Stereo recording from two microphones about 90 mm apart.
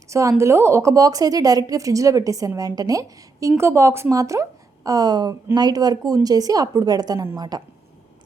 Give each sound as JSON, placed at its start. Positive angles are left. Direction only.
{"t": 0.1, "sound": "a woman's voice", "side_deg": -35}